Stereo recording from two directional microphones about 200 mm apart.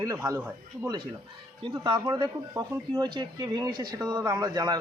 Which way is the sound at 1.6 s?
20° right (ahead or behind).